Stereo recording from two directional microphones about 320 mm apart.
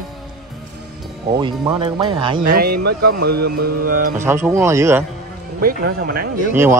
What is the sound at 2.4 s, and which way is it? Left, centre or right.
Speech, right.